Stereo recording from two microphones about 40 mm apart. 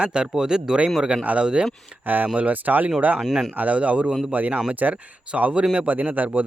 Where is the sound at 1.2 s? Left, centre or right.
Right.